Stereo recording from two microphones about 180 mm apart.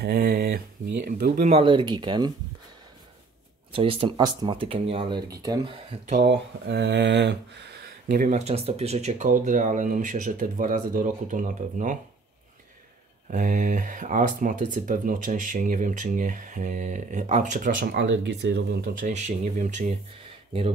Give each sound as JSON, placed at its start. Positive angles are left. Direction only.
{"t": 0.0, "sound": "a sound", "side_deg": -60}
{"t": 1.0, "sound": "speech", "side_deg": -45}
{"t": 3.7, "sound": "speech", "side_deg": -30}
{"t": 6.2, "sound": "speech", "side_deg": -70}
{"t": 8.1, "sound": "speech", "side_deg": -45}
{"t": 13.3, "sound": "speech", "side_deg": -45}
{"t": 17.9, "sound": "speech", "side_deg": -85}
{"t": 18.9, "sound": "speech", "side_deg": -40}